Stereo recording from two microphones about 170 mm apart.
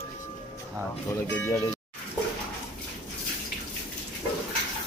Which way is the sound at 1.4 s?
15° left (ahead or behind).